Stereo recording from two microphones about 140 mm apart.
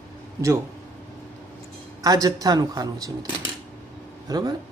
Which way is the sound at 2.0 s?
25° right (ahead or behind).